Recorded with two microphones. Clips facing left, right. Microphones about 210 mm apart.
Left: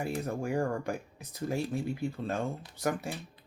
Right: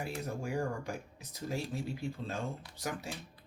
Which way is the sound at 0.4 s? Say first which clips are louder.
Left 5 dB; 55° left (ahead or behind).